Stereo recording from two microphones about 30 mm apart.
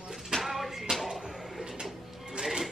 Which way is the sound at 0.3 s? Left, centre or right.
Centre.